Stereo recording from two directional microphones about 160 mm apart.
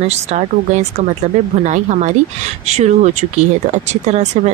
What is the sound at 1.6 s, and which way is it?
Speech, 45° right (ahead or behind).